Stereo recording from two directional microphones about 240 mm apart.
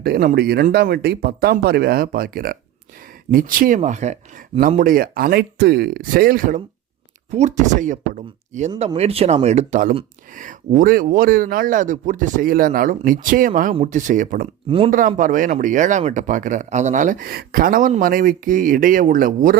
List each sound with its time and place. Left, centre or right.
0.0 s speech: right